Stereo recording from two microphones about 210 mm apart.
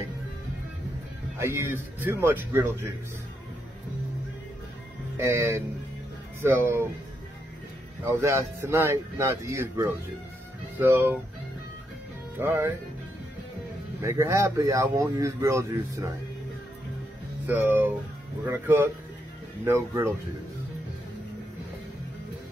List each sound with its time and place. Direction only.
1.4 s a man's voice: 10° right (ahead or behind)
5.1 s a man's voice: 10° right (ahead or behind)
8.0 s a man's voice: 10° right (ahead or behind)
12.4 s a man's voice: 10° right (ahead or behind)
14.0 s a man's voice: 15° right (ahead or behind)
17.5 s a man's voice: 10° right (ahead or behind)